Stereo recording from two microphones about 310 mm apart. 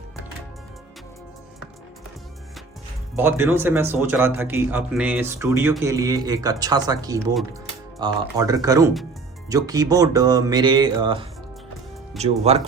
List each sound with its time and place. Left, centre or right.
3.2 s speech: centre